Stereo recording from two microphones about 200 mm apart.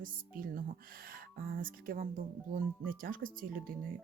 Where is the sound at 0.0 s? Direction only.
45° right (ahead or behind).